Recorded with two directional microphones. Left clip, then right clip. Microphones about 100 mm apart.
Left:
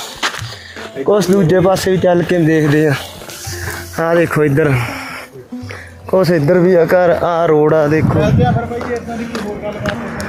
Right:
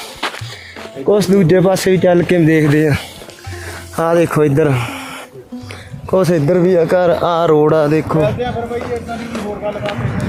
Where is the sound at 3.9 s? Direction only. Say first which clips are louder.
Even; 15° right (ahead or behind).